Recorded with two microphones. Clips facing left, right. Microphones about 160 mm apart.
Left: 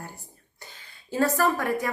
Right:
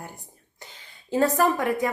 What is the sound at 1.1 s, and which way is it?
Speech, 20° right (ahead or behind).